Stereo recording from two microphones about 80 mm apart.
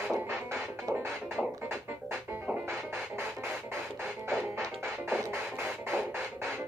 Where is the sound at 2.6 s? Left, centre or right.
Right.